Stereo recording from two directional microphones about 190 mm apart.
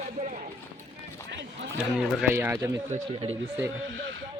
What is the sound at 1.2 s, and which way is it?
Run, 70° right (ahead or behind).